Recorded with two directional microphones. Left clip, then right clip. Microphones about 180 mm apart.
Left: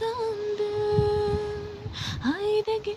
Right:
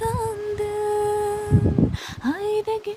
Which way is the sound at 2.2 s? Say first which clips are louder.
Right 2 dB; 45° right (ahead or behind).